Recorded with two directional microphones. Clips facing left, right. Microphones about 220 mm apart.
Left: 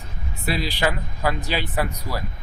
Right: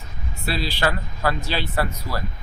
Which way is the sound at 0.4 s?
15° left (ahead or behind).